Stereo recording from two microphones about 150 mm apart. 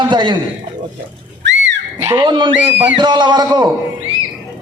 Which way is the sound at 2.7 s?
10° right (ahead or behind).